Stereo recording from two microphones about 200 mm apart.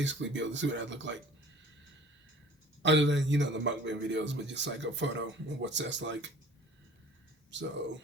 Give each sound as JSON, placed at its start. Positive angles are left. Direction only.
{"t": 0.0, "sound": "speech", "side_deg": -65}
{"t": 2.8, "sound": "speech", "side_deg": -65}
{"t": 7.5, "sound": "speech", "side_deg": -65}